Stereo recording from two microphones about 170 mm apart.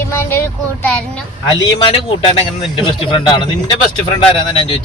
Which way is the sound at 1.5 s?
30° left (ahead or behind).